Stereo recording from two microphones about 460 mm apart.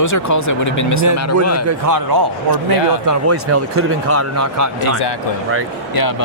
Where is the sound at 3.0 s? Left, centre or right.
Right.